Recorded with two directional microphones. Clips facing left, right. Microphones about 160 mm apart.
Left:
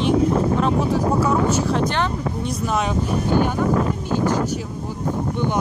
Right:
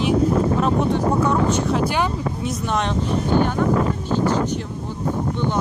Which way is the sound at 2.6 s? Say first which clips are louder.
Even; 5° left (ahead or behind).